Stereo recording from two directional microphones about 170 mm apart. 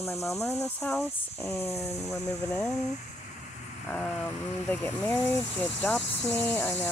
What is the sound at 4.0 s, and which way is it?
Speech, 10° left (ahead or behind).